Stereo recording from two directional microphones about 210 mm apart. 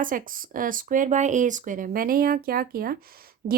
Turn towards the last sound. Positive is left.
turn(degrees=-45)  # may be behind; listen again after turning